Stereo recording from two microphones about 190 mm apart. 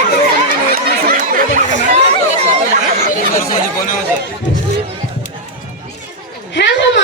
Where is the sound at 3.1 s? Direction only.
45° left (ahead or behind).